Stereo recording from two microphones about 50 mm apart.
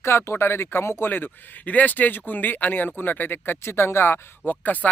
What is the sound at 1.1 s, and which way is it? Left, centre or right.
Speech, left.